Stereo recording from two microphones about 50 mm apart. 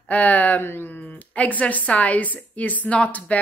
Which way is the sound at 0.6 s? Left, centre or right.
Left.